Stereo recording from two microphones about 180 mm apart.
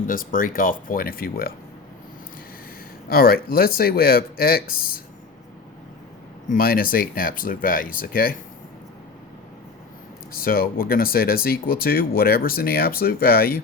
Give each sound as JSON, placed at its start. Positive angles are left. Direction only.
{"t": 0.1, "sound": "speech", "side_deg": 50}
{"t": 3.1, "sound": "speech", "side_deg": 55}
{"t": 6.5, "sound": "speech", "side_deg": 55}
{"t": 10.3, "sound": "speech", "side_deg": 55}